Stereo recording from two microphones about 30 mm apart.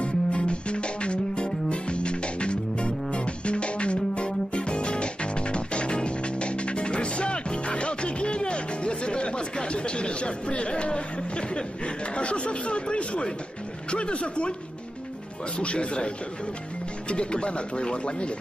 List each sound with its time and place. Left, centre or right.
0.0 s music: left
13.8 s speech: left
15.6 s speech: left
17.1 s speech: left